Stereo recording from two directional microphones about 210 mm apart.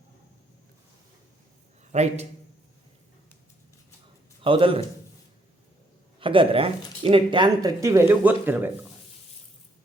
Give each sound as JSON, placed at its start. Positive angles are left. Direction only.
{"t": 1.9, "sound": "a man's voice", "side_deg": -30}
{"t": 4.4, "sound": "speech", "side_deg": -25}
{"t": 6.1, "sound": "speech", "side_deg": -25}